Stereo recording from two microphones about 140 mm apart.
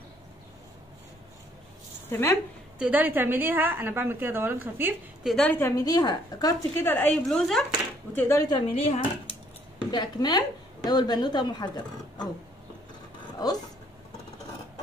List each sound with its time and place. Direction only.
2.0 s speech: 15° left (ahead or behind)
2.8 s a woman's voice: 10° right (ahead or behind)
5.2 s a woman's voice: 5° left (ahead or behind)
5.6 s a woman's voice: 20° left (ahead or behind)
6.9 s a woman's voice: 15° left (ahead or behind)
7.2 s a woman's voice: 5° left (ahead or behind)
8.1 s a woman's voice: 20° left (ahead or behind)
8.5 s speech: 45° left (ahead or behind)
9.8 s a woman's voice: 30° left (ahead or behind)